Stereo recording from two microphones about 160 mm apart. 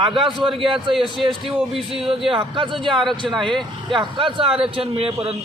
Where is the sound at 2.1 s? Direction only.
35° right (ahead or behind).